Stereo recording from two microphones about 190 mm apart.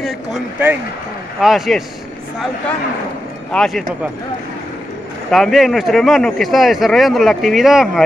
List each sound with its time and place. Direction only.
0.0 s speech: 5° right (ahead or behind)
3.5 s speech: centre (ahead or behind)
5.3 s speech: centre (ahead or behind)